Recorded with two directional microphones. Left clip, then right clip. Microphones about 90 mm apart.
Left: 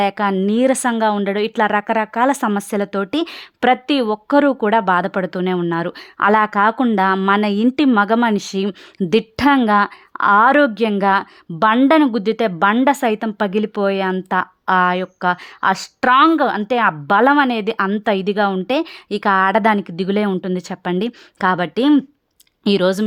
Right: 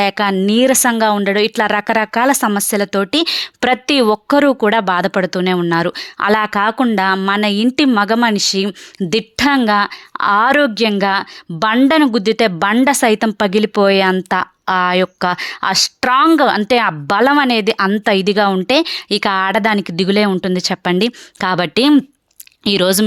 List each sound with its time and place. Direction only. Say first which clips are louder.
0.0 s a woman's voice: right 3 dB; 10° right (ahead or behind); by 2.3 s 25° right (ahead or behind)
2.4 s a woman's voice: right 4 dB; 5° right (ahead or behind)
3.3 s a woman's voice: right 1 dB; 25° right (ahead or behind)
4.4 s a woman's voice: right 2 dB; 15° right (ahead or behind)
6.1 s speech: left 1 dB; 10° right (ahead or behind)
10.4 s a woman's voice: right 1 dB; 25° right (ahead or behind)
10.8 s a woman's voice: right 1 dB; 10° right (ahead or behind)
13.1 s a woman's voice: right 5 dB; 30° right (ahead or behind)
19.5 s a woman's voice: right 1 dB; 5° right (ahead or behind)
20.4 s a woman's voice: right 6 dB; 30° right (ahead or behind)
21.5 s a woman's voice: right 5 dB; 35° right (ahead or behind)